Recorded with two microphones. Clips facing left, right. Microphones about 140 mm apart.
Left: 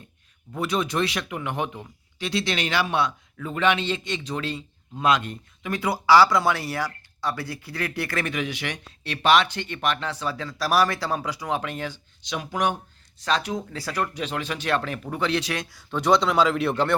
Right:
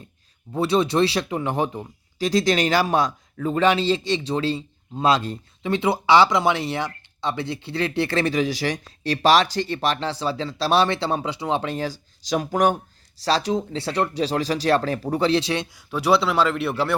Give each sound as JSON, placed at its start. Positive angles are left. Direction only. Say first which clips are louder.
{"t": 0.5, "sound": "speech", "louder": "right 5 dB", "side_deg": -30}
{"t": 13.2, "sound": "speech", "louder": "right 4 dB", "side_deg": -35}
{"t": 15.9, "sound": "speech", "louder": "right 1 dB", "side_deg": -5}